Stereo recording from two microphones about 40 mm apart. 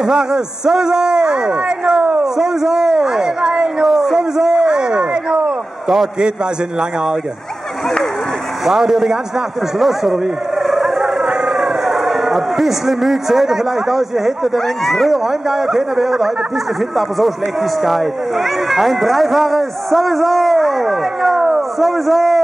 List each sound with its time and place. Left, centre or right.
0.0 s a man's voice: centre
3.8 s a sound: centre
8.6 s a man's voice: centre
10.7 s a sound: centre
11.4 s speech: centre
15.4 s a man's voice: centre
17.8 s speech: centre